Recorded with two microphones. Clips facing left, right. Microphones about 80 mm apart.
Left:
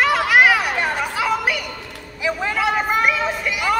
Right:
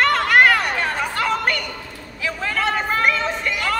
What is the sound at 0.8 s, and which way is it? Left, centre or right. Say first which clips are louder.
Chatter: left 1 dB; centre.